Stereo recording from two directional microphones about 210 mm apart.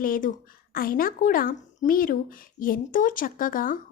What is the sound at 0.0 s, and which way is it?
A woman's voice, 40° left (ahead or behind).